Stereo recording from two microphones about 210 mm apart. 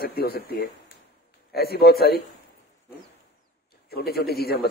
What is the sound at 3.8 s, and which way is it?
Speech, 50° left (ahead or behind).